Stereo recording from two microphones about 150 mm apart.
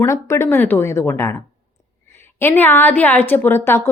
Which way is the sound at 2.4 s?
15° left (ahead or behind).